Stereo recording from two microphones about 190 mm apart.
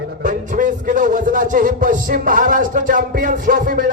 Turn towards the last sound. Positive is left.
turn(degrees=-45)  # may be behind; listen again after turning